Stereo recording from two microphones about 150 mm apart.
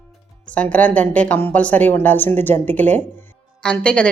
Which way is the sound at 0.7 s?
10° left (ahead or behind).